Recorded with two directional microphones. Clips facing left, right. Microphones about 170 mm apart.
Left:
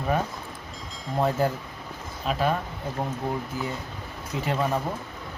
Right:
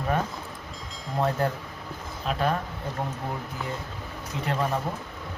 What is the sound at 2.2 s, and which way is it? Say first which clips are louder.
Speech: left 1 dB; centre (ahead or behind).